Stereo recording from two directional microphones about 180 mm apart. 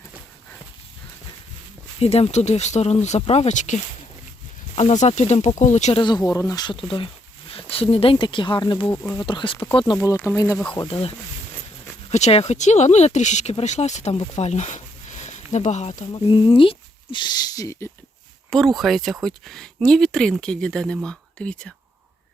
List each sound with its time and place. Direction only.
2.0 s speech: 35° left (ahead or behind)
6.0 s speech: 25° left (ahead or behind)
8.9 s speech: 15° left (ahead or behind)
9.2 s speech: 30° left (ahead or behind)
10.8 s speech: 30° left (ahead or behind)
12.1 s speech: 35° left (ahead or behind)
16.1 s speech: 30° left (ahead or behind)
18.5 s speech: centre (ahead or behind)